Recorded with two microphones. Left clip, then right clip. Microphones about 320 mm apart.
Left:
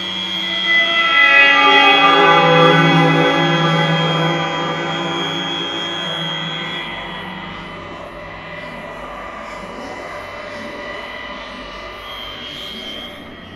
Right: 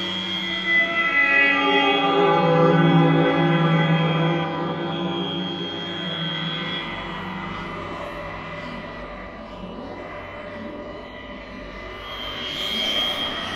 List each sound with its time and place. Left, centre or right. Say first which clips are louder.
0.0 s music: left 5 dB; centre
12.7 s vehicle: right 6 dB; centre